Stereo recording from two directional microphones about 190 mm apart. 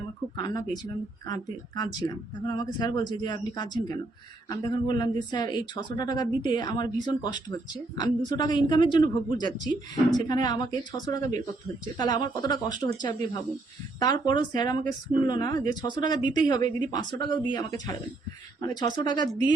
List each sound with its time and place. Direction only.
0.3 s speech: 20° left (ahead or behind)